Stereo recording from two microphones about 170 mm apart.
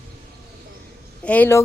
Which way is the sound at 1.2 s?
10° left (ahead or behind).